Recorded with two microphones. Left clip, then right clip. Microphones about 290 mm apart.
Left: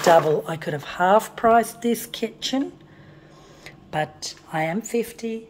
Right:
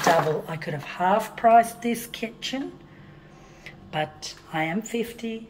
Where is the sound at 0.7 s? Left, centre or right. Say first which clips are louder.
Left 4 dB; centre.